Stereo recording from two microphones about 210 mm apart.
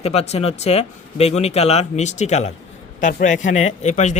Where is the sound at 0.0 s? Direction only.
30° left (ahead or behind).